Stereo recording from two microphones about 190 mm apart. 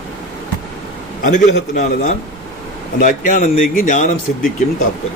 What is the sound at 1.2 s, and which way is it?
A man's voice, 40° left (ahead or behind).